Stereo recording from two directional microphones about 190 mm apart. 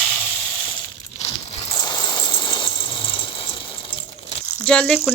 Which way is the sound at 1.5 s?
25° left (ahead or behind).